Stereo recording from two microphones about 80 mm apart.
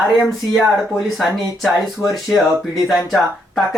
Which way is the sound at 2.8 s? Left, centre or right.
Centre.